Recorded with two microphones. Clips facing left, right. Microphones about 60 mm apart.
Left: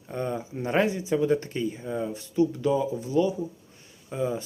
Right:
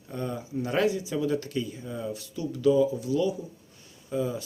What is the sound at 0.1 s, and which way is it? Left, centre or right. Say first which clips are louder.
Speech: left 2 dB; left.